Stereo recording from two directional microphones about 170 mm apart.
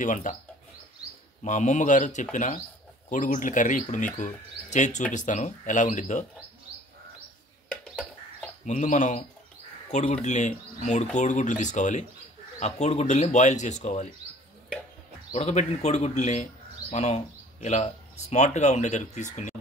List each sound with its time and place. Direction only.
0.0 s speech: 50° left (ahead or behind)
1.4 s speech: 45° left (ahead or behind)
8.6 s speech: 45° left (ahead or behind)
15.3 s speech: 40° left (ahead or behind)